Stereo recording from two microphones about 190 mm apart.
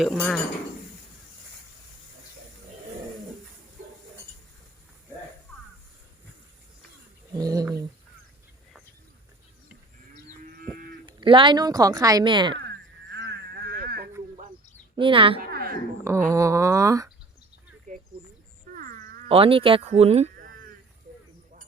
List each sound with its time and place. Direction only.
0.0 s speech: 5° left (ahead or behind)
7.3 s speech: 20° right (ahead or behind)
11.0 s speech: 25° right (ahead or behind)
13.1 s a sound: 65° right (ahead or behind)
14.9 s speech: 25° right (ahead or behind)
15.4 s a sound: 50° right (ahead or behind)
16.0 s speech: 15° right (ahead or behind)
17.9 s a sound: 40° right (ahead or behind)
19.3 s speech: 30° right (ahead or behind)